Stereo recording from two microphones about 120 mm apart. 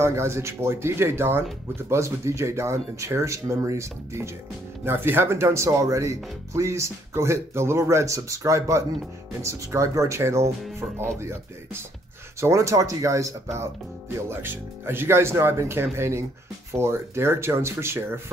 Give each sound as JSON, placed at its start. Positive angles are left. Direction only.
{"t": 0.0, "sound": "speech", "side_deg": -20}
{"t": 12.4, "sound": "speech", "side_deg": -25}